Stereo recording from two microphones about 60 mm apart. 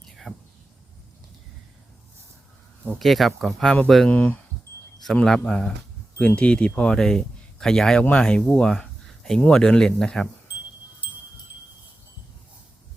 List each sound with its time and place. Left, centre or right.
0.0 s a sound: centre
3.0 s speech: centre
4.1 s speech: left
5.1 s a man's voice: centre